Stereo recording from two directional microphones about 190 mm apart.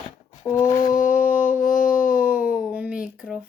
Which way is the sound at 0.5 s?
15° left (ahead or behind).